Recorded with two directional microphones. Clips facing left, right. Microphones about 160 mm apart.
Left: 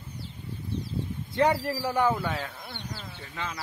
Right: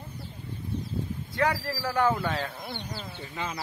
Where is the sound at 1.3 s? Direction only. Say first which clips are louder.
Left 4 dB; 25° left (ahead or behind); by 2.5 s 5° left (ahead or behind).